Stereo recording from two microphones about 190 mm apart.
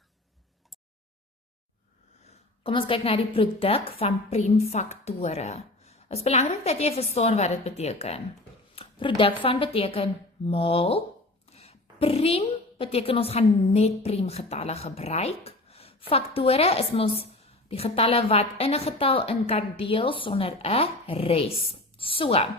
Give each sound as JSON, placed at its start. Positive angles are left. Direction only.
{"t": 2.2, "sound": "a woman's voice", "side_deg": 30}